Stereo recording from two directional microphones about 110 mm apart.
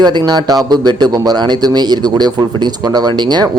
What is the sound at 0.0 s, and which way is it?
A man's voice, 40° right (ahead or behind).